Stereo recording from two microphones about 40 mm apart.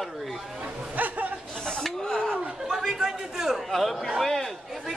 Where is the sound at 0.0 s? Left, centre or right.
Centre.